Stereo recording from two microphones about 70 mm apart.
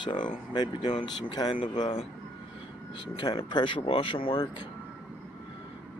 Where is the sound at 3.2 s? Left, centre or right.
Left.